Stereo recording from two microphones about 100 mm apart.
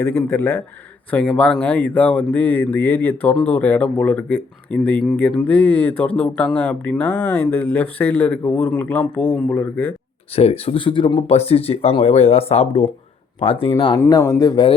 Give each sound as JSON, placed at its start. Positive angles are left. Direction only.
{"t": 0.2, "sound": "speech", "side_deg": 25}
{"t": 10.3, "sound": "speech", "side_deg": 75}
{"t": 10.8, "sound": "speech", "side_deg": 55}
{"t": 13.4, "sound": "speech", "side_deg": 70}
{"t": 14.1, "sound": "speech", "side_deg": 35}